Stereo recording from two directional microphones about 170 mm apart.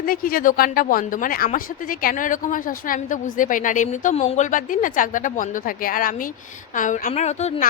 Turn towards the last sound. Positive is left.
turn(degrees=40)  # may be behind; listen again after turning